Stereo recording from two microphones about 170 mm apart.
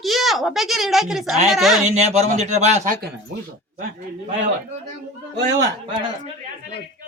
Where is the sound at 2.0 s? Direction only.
40° right (ahead or behind).